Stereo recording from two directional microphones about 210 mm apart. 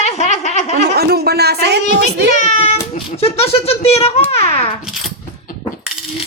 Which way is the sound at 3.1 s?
30° left (ahead or behind).